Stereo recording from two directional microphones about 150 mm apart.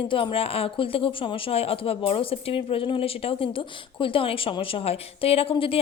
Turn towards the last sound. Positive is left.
turn(degrees=40)  # may be behind; listen again after turning